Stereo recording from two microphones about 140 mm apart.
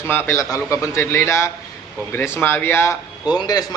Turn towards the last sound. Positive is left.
turn(degrees=30)  # may be behind; listen again after turning